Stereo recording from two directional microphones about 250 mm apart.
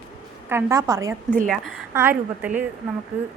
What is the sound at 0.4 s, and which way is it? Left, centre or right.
Speech, centre.